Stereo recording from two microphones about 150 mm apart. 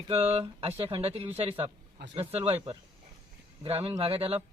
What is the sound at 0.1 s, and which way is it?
Speech, 40° right (ahead or behind).